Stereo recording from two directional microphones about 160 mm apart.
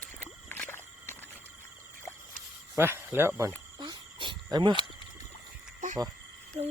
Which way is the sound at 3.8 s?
30° right (ahead or behind).